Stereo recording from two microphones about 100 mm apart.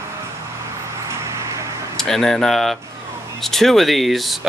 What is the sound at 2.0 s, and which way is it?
Speech, 5° left (ahead or behind).